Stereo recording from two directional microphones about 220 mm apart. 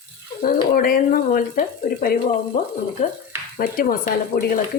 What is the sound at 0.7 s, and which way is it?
Speech, 40° left (ahead or behind).